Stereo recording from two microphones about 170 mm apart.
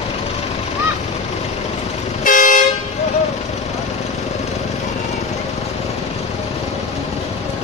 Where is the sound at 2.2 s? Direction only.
55° left (ahead or behind).